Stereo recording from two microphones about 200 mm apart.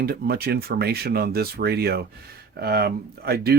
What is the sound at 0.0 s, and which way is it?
Speech, 50° right (ahead or behind).